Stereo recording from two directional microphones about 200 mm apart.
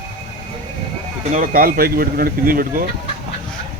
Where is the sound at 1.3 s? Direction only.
45° right (ahead or behind).